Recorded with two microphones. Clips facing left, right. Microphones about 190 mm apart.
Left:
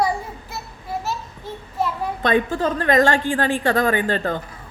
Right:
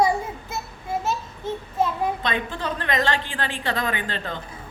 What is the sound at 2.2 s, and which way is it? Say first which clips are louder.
A woman's voice: left 8 dB; 45° left (ahead or behind).